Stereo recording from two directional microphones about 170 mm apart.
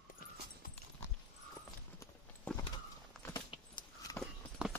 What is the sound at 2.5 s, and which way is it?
Horse, 10° left (ahead or behind).